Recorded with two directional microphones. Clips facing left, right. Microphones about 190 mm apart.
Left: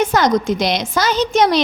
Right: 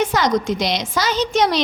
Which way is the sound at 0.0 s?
45° left (ahead or behind).